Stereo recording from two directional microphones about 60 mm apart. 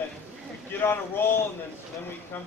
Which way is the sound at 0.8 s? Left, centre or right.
Left.